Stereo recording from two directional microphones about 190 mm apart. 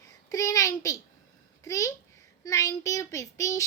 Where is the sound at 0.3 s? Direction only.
15° left (ahead or behind).